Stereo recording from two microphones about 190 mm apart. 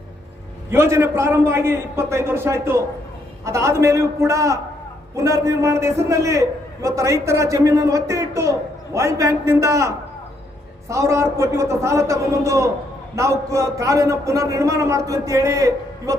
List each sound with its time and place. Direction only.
0.7 s a man's voice: 15° right (ahead or behind)